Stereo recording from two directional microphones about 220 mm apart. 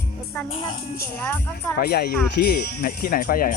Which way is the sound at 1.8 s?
45° left (ahead or behind).